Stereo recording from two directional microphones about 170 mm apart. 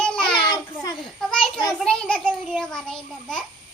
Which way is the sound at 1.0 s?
5° left (ahead or behind).